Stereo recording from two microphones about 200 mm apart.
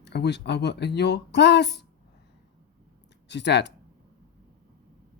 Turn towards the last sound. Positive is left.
turn(degrees=60)  # may be behind; listen again after turning